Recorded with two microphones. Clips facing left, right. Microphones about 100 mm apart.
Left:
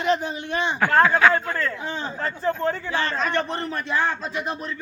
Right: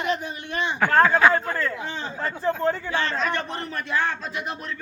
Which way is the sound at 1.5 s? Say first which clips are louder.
Left 1 dB; 15° right (ahead or behind).